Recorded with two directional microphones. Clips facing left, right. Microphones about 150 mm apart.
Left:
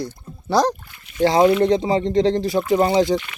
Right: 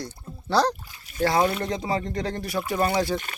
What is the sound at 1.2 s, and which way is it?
Speech, 25° left (ahead or behind).